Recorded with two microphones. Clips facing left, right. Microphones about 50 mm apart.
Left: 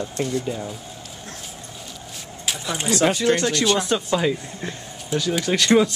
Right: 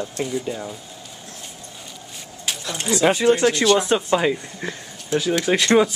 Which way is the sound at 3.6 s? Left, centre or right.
Centre.